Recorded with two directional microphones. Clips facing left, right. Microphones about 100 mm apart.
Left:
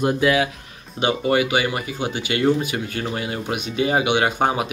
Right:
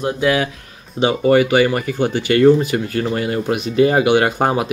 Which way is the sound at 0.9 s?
30° right (ahead or behind).